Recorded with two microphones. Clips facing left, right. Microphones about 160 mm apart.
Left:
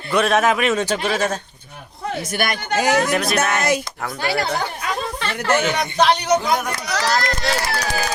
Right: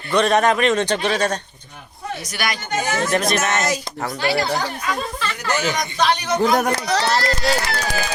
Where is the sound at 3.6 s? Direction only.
55° left (ahead or behind).